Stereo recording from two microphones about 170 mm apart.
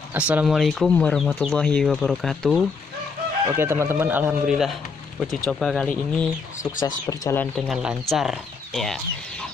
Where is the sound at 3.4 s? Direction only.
15° right (ahead or behind); by 6.3 s 5° left (ahead or behind).